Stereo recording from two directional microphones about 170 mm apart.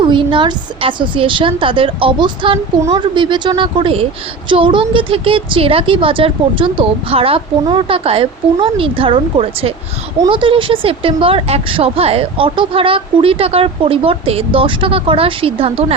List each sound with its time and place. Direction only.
0.0 s a woman's voice: 30° right (ahead or behind)